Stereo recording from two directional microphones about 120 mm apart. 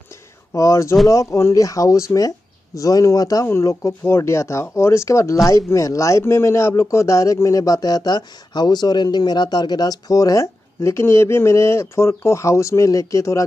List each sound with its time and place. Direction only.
0.5 s speech: 25° left (ahead or behind)